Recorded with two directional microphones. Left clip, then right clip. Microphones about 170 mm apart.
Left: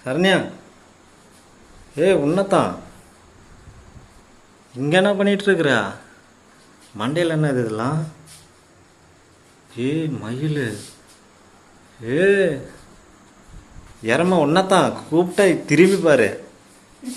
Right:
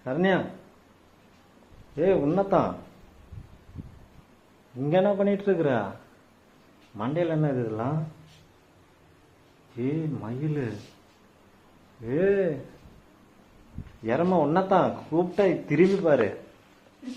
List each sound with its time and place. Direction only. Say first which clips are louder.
0.0 s a man's voice: left 7 dB; 15° left (ahead or behind)
2.0 s a man's voice: left 6 dB; 15° left (ahead or behind)
4.9 s a man's voice: left 6 dB; 10° left (ahead or behind)
6.9 s a man's voice: left 6 dB; 15° left (ahead or behind)
9.7 s a man's voice: left 7 dB; 10° left (ahead or behind)
12.0 s a man's voice: left 7 dB; 20° left (ahead or behind)
14.0 s speech: left 6 dB; 20° left (ahead or behind)